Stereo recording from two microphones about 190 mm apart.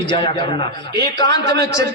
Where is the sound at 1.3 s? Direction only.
60° right (ahead or behind).